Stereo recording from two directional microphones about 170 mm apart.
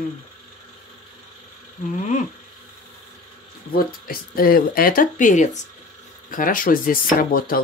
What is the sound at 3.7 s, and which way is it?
Speech, 60° left (ahead or behind).